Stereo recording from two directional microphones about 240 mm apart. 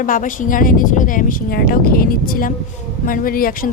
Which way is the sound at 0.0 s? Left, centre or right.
Left.